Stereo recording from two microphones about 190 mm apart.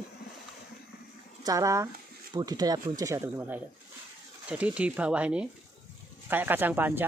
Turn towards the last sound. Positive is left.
turn(degrees=-10)  # may be behind; listen again after turning